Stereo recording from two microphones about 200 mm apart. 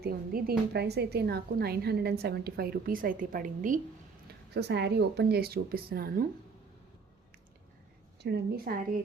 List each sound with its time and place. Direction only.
0.0 s a woman's voice: 50° right (ahead or behind)
4.3 s a woman's voice: 55° right (ahead or behind)
8.2 s a woman's voice: 55° right (ahead or behind)